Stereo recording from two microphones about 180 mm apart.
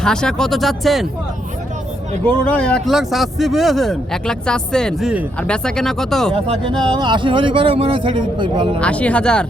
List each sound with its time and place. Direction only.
0.0 s speech: 5° left (ahead or behind)
2.2 s speech: 5° left (ahead or behind)
6.3 s speech: 30° right (ahead or behind)
8.8 s speech: 5° left (ahead or behind)